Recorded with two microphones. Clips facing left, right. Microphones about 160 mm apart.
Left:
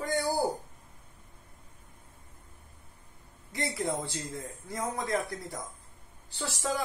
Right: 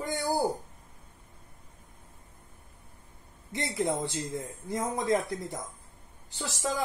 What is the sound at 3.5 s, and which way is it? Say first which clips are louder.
Speech: right 2 dB; 20° right (ahead or behind).